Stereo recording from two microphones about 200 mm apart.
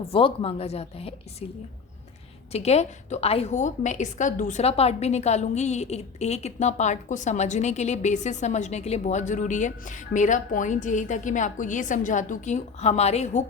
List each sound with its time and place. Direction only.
0.0 s a woman's voice: 30° left (ahead or behind)
2.5 s a woman's voice: 30° left (ahead or behind)